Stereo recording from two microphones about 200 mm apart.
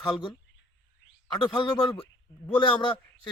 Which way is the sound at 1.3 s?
25° left (ahead or behind).